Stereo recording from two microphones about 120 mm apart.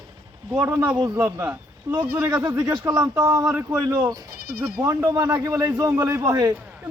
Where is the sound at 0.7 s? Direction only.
10° right (ahead or behind).